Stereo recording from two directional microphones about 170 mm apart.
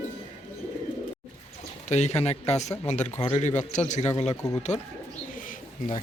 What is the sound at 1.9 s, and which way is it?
A man's voice, 40° left (ahead or behind).